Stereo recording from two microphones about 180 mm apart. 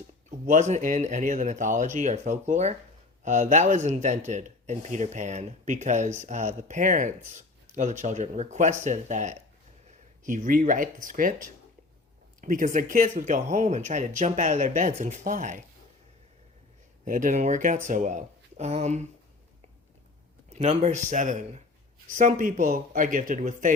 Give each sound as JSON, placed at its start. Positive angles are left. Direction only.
{"t": 0.3, "sound": "speech", "side_deg": -45}
{"t": 12.4, "sound": "speech", "side_deg": -45}
{"t": 17.1, "sound": "speech", "side_deg": -45}
{"t": 20.5, "sound": "speech", "side_deg": -40}